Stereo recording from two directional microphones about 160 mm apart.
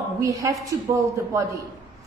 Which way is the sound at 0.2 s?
20° right (ahead or behind).